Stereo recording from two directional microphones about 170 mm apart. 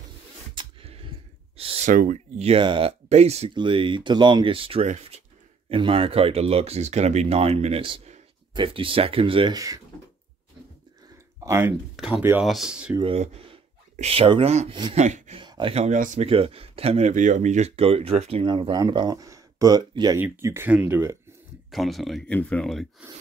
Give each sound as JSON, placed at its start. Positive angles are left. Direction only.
{"t": 0.6, "sound": "a sound", "side_deg": -35}
{"t": 1.9, "sound": "speech", "side_deg": -50}
{"t": 11.4, "sound": "speech", "side_deg": -15}
{"t": 12.9, "sound": "speech", "side_deg": -30}
{"t": 15.0, "sound": "speech", "side_deg": -45}
{"t": 15.3, "sound": "speech", "side_deg": -30}
{"t": 15.7, "sound": "speech", "side_deg": -45}
{"t": 20.2, "sound": "speech", "side_deg": -15}
{"t": 21.6, "sound": "speech", "side_deg": 0}